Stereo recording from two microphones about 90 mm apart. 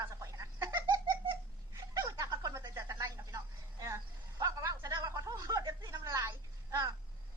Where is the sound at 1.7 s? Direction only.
40° right (ahead or behind).